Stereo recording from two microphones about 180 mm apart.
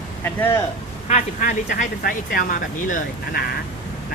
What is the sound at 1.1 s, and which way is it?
Speech, 40° left (ahead or behind).